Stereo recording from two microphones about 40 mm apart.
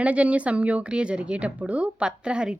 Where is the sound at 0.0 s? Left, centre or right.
Right.